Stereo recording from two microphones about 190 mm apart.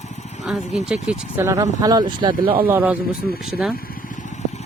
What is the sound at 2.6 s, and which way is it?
Speech, 10° right (ahead or behind).